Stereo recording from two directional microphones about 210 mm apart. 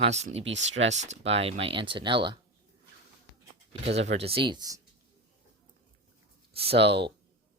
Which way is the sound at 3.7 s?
30° right (ahead or behind).